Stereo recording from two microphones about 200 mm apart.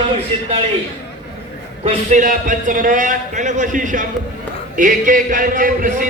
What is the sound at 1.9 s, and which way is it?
A man's voice, 40° right (ahead or behind).